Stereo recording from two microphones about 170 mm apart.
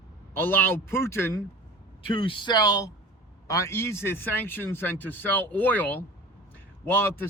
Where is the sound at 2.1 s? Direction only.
30° left (ahead or behind); by 6.0 s 10° left (ahead or behind).